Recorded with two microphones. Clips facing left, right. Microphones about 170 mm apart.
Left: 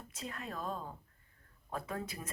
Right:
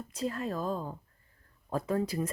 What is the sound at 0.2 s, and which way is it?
Speech, 35° right (ahead or behind).